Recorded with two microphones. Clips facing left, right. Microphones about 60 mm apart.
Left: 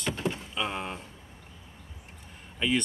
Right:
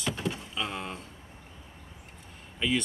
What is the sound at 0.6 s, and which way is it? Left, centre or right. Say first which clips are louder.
Speech: left 2 dB; centre.